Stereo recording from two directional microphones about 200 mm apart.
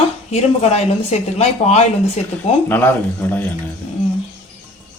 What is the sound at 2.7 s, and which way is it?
Speech, 10° left (ahead or behind).